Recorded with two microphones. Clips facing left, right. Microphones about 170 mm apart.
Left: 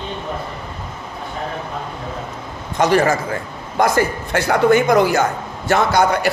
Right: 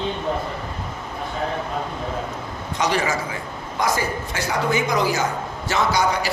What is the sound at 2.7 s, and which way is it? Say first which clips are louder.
A man's voice: left 7 dB; 50° left (ahead or behind).